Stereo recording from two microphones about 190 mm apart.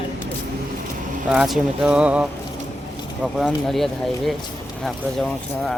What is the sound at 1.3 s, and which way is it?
Speech, 5° right (ahead or behind).